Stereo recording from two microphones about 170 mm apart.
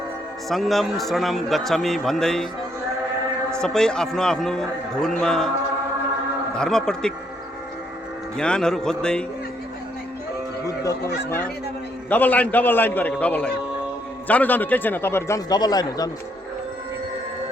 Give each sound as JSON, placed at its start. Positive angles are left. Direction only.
{"t": 0.4, "sound": "a man's voice", "side_deg": 0}
{"t": 3.5, "sound": "a man's voice", "side_deg": 5}
{"t": 6.5, "sound": "a man's voice", "side_deg": 5}
{"t": 8.4, "sound": "a man's voice", "side_deg": 5}
{"t": 10.7, "sound": "a man's voice", "side_deg": 15}